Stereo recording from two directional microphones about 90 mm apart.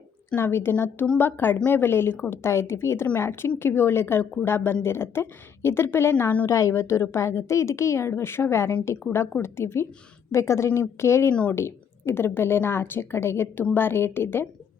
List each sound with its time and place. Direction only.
0.3 s a woman's voice: 25° left (ahead or behind)